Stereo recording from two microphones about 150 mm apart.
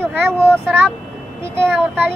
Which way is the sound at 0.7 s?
10° right (ahead or behind).